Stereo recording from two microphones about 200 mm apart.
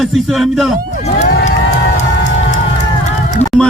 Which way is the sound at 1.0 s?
35° left (ahead or behind).